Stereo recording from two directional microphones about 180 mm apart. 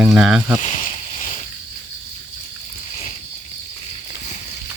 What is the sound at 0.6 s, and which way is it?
Speech, 40° left (ahead or behind).